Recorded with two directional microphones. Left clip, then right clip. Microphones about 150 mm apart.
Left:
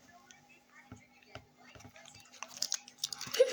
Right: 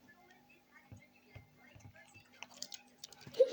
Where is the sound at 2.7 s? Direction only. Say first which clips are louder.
Left 13 dB; 30° left (ahead or behind).